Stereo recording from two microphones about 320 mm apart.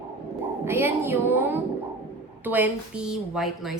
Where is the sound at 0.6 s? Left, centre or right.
Centre.